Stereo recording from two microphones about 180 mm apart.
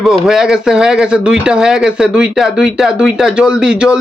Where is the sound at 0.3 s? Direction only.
5° right (ahead or behind).